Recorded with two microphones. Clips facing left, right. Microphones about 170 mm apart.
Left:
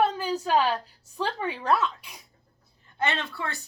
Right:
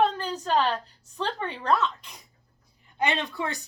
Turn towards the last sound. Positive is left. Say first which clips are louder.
# right 3 dB
turn(degrees=-15)  # may be behind; listen again after turning